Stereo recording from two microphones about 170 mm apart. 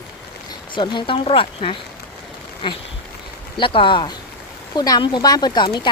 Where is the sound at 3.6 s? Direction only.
30° left (ahead or behind).